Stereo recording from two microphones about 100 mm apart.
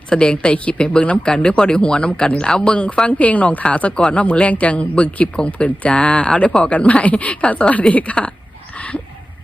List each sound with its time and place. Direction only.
0.1 s speech: 10° left (ahead or behind)